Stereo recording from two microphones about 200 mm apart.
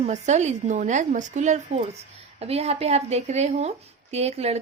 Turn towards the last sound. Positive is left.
turn(degrees=-30)  # may be behind; listen again after turning